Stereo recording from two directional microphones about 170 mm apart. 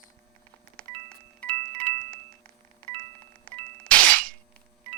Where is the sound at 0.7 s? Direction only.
5° left (ahead or behind).